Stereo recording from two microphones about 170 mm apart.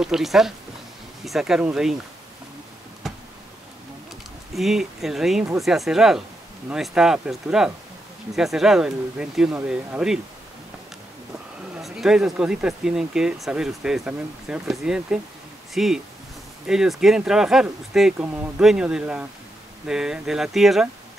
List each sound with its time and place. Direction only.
0.0 s speech: centre (ahead or behind)
3.0 s a sound: centre (ahead or behind)
4.6 s speech: centre (ahead or behind)
11.7 s speech: 5° right (ahead or behind)